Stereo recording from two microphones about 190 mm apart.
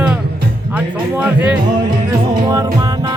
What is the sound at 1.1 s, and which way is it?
Speech, 10° right (ahead or behind).